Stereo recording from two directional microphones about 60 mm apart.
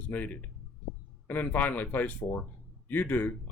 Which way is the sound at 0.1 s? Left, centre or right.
Left.